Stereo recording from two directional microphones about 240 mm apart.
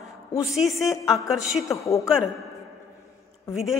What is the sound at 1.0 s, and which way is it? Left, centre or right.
A woman's voice, centre.